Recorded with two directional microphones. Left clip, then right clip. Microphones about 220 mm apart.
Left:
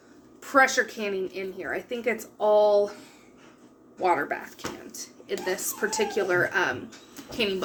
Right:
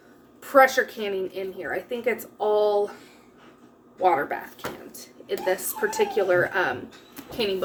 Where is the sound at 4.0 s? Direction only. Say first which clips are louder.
Right 3 dB; 5° left (ahead or behind).